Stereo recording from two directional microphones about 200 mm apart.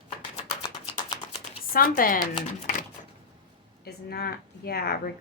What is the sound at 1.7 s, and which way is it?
Speech, 45° left (ahead or behind).